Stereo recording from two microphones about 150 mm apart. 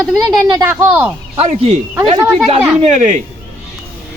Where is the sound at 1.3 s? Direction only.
45° right (ahead or behind).